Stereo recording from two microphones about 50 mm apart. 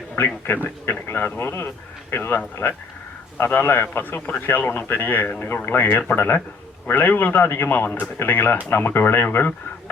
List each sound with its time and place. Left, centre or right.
0.4 s a man's voice: left